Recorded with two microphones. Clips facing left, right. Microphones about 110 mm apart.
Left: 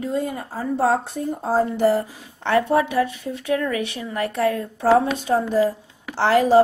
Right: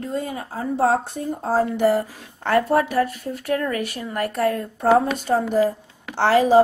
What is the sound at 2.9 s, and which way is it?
A woman's voice, 40° right (ahead or behind).